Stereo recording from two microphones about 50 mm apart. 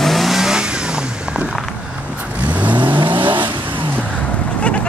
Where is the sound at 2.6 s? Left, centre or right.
Right.